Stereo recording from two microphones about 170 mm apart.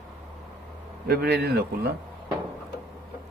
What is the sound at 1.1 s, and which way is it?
Speech, 65° right (ahead or behind).